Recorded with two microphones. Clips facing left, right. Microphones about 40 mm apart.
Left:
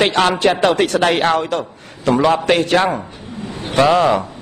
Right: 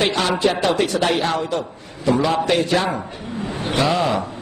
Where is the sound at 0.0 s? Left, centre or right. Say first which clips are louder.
Left 4 dB; left.